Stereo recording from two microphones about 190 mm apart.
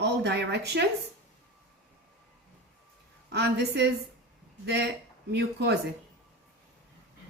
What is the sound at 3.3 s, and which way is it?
Speech, 60° right (ahead or behind).